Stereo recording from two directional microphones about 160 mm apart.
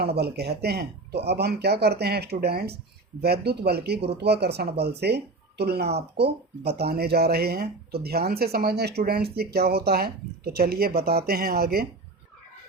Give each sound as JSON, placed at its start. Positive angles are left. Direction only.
{"t": 0.2, "sound": "speech", "side_deg": -90}